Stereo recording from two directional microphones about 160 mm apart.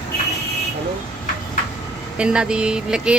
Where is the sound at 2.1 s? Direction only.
5° right (ahead or behind).